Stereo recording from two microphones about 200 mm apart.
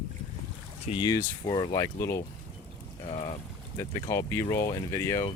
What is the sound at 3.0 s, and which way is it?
Boat, 30° left (ahead or behind).